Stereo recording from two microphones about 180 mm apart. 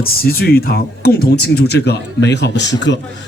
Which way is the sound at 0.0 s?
55° left (ahead or behind).